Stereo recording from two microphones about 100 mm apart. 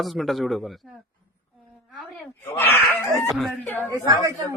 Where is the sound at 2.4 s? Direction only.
20° left (ahead or behind).